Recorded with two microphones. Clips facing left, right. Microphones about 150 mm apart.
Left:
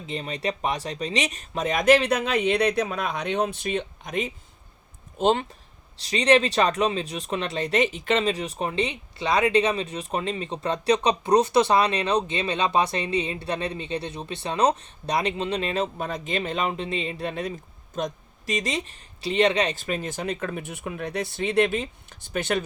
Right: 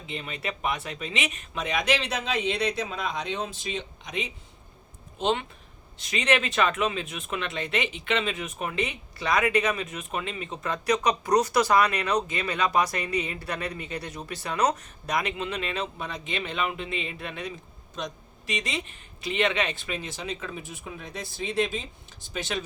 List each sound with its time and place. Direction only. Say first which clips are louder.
0.1 s speech: left 5 dB; 35° left (ahead or behind); by 22.6 s 55° left (ahead or behind)